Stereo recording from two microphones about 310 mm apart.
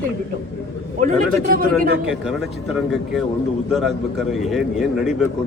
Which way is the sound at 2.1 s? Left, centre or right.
Centre.